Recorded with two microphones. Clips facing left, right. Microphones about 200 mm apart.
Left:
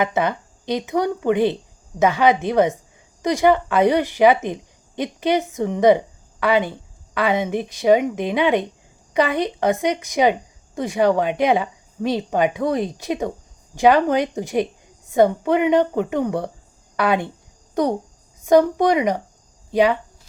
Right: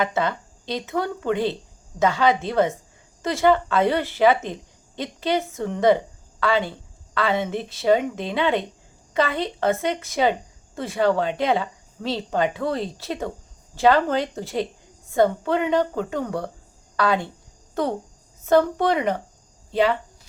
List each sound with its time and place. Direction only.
0.0 s a woman's voice: 15° left (ahead or behind)